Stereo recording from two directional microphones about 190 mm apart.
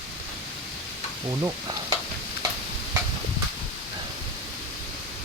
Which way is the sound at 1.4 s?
20° right (ahead or behind).